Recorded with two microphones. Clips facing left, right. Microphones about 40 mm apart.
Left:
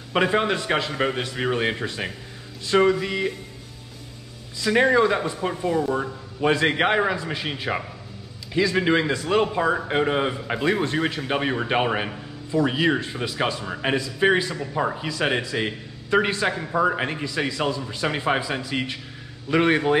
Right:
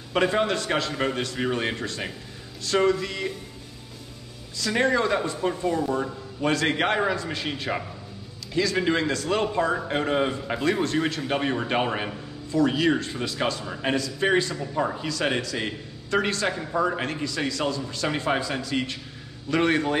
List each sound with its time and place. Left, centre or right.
0.1 s a man's voice: centre
4.6 s a man's voice: centre